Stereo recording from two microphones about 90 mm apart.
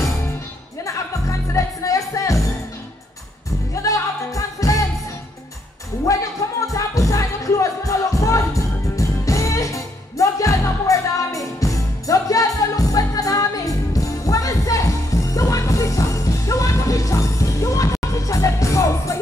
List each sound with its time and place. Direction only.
1.5 s music: 35° left (ahead or behind)
3.7 s music: 35° left (ahead or behind)
6.1 s music: 40° left (ahead or behind)